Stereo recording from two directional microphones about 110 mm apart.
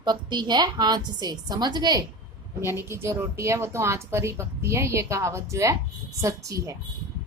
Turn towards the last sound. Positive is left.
turn(degrees=-30)  # may be behind; listen again after turning